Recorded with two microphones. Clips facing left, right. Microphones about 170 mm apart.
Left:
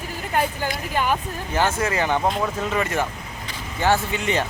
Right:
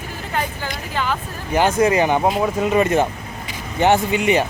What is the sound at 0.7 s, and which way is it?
Vehicle, 10° left (ahead or behind).